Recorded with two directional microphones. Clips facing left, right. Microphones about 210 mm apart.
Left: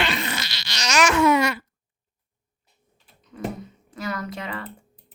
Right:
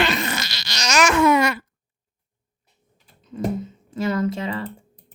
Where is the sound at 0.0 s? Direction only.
45° right (ahead or behind).